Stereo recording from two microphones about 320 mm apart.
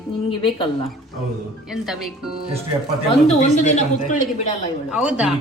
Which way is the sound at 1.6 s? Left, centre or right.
Centre.